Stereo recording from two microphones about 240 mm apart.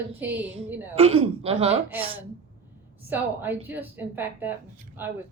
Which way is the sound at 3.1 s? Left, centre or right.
Centre.